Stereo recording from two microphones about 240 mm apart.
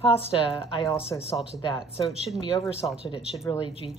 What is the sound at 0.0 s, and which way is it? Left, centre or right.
A woman's voice, left.